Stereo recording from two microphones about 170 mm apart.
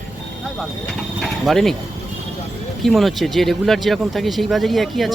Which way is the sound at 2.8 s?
Centre (ahead or behind).